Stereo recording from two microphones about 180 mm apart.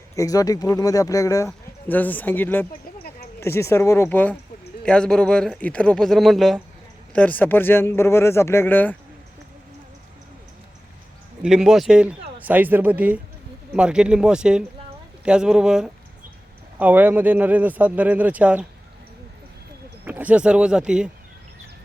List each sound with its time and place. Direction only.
0.2 s speech: 20° left (ahead or behind)
11.4 s a man's voice: 5° right (ahead or behind)
20.1 s speech: 10° right (ahead or behind)